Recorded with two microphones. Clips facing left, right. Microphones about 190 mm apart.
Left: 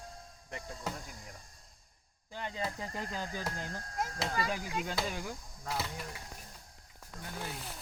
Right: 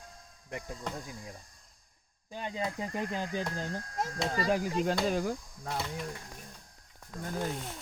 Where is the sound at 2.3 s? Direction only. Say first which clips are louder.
Right 3 dB; 15° right (ahead or behind); by 5.4 s 40° right (ahead or behind).